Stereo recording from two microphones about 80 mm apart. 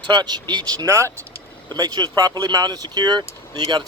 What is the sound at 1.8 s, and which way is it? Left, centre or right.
Speech, right.